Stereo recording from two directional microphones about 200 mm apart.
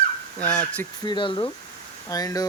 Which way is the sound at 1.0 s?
25° left (ahead or behind).